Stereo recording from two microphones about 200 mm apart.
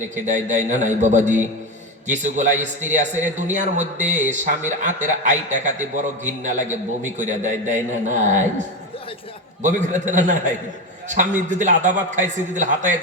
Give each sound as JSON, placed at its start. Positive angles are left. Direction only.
{"t": 0.3, "sound": "a man's voice", "side_deg": -40}
{"t": 9.6, "sound": "a man's voice", "side_deg": -40}